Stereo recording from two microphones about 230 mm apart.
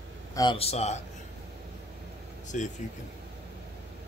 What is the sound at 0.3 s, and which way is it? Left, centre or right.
Speech, centre.